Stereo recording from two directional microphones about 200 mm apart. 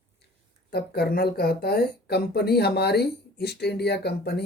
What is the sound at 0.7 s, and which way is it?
Speech, 50° left (ahead or behind).